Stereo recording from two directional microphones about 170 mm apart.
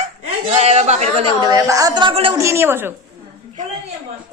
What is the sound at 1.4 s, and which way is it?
Speech, 20° right (ahead or behind).